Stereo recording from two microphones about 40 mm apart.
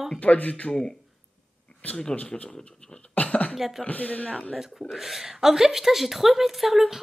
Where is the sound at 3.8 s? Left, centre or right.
Left.